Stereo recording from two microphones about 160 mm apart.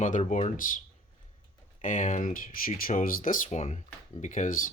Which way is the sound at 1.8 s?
50° left (ahead or behind).